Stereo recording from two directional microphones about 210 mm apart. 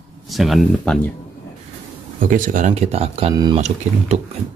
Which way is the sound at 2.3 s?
40° right (ahead or behind).